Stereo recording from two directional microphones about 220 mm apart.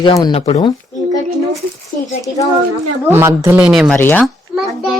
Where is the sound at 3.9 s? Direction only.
10° left (ahead or behind).